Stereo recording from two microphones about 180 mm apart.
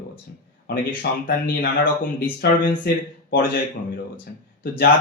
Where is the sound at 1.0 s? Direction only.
65° left (ahead or behind).